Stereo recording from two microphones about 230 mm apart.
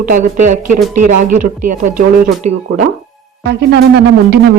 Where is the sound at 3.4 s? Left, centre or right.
Right.